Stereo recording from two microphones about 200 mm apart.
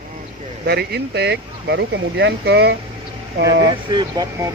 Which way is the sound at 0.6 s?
55° right (ahead or behind).